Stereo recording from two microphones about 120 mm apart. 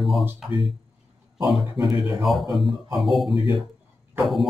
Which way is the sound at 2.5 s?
Centre (ahead or behind).